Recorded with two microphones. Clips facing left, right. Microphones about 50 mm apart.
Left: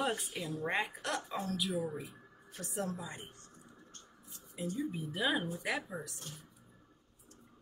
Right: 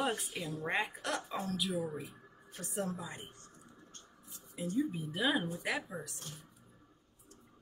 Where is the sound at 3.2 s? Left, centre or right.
Right.